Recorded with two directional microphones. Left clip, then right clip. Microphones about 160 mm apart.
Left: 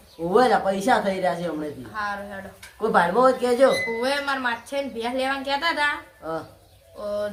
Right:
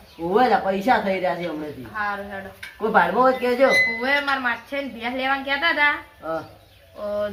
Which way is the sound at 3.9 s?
55° left (ahead or behind).